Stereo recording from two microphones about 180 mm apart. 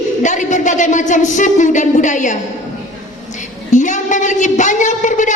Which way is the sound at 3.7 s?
45° left (ahead or behind).